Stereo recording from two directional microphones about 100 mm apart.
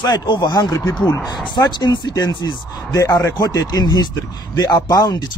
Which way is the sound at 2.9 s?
30° left (ahead or behind).